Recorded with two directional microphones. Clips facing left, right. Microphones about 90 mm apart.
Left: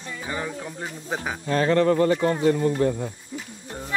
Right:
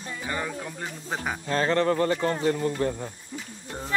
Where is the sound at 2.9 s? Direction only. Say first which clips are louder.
Left 5 dB; 55° left (ahead or behind).